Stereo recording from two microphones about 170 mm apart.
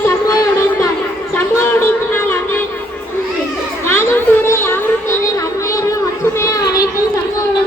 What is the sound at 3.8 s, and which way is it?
Children playing, 15° left (ahead or behind).